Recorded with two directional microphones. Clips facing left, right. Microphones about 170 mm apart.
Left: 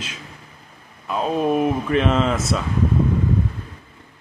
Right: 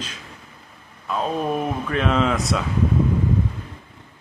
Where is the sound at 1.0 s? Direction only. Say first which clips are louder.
Left 3 dB; 5° left (ahead or behind).